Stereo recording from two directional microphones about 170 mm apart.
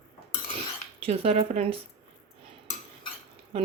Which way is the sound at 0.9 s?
35° right (ahead or behind).